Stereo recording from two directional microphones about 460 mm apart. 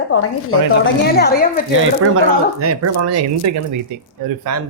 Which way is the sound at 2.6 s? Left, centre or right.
Right.